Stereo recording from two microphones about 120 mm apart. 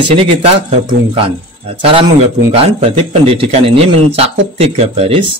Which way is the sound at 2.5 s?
60° right (ahead or behind).